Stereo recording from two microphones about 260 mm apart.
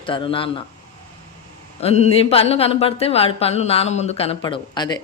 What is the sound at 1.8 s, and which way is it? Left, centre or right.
Speech, left.